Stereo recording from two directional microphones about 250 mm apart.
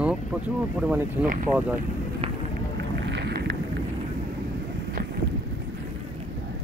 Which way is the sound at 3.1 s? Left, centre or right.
Right.